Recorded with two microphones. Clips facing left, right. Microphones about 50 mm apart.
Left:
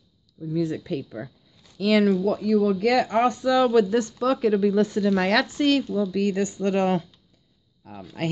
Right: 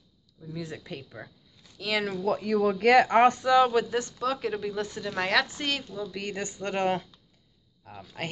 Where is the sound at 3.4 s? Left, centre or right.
Right.